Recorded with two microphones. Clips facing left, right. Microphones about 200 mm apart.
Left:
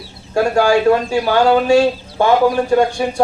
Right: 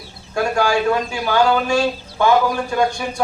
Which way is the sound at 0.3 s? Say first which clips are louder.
Left 5 dB; 35° left (ahead or behind).